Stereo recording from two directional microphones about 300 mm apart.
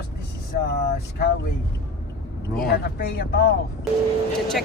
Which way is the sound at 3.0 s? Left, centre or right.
Left.